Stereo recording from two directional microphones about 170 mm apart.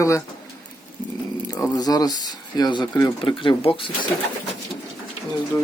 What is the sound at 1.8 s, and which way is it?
Speech, 20° left (ahead or behind).